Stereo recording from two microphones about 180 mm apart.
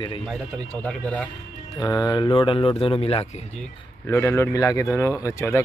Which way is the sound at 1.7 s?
20° left (ahead or behind).